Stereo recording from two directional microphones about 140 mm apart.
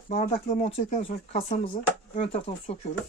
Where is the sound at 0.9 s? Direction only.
50° left (ahead or behind).